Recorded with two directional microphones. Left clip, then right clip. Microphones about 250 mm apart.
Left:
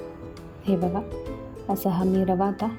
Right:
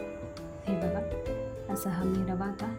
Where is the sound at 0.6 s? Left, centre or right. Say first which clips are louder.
Left 6 dB; centre.